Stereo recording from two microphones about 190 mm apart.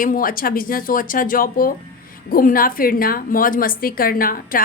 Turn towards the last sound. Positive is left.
turn(degrees=50)  # may be behind; listen again after turning